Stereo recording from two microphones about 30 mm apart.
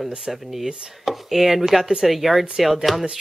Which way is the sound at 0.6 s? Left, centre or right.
Right.